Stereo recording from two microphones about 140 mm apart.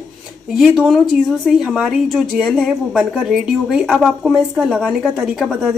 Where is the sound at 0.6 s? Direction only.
Centre (ahead or behind).